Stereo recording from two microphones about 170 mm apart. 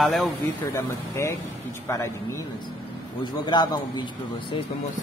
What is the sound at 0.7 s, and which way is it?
A man's voice, 15° left (ahead or behind).